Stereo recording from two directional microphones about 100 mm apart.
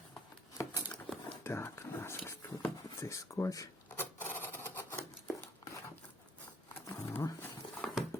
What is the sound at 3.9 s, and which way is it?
Filing, 20° left (ahead or behind).